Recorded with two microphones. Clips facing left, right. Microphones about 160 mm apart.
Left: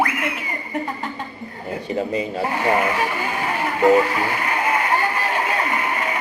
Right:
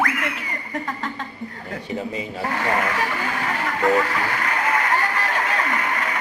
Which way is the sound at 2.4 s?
20° left (ahead or behind).